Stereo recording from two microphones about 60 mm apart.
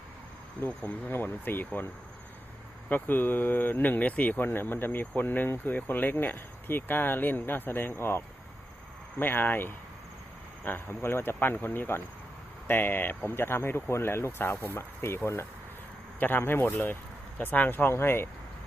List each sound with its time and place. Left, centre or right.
0.7 s speech: left
2.9 s speech: left
4.4 s speech: left